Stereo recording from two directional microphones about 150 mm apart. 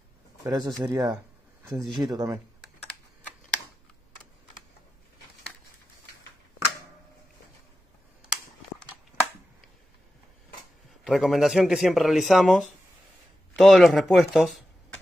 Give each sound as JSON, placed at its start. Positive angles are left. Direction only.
{"t": 0.5, "sound": "speech", "side_deg": 0}
{"t": 0.8, "sound": "speech", "side_deg": -25}
{"t": 11.1, "sound": "speech", "side_deg": 0}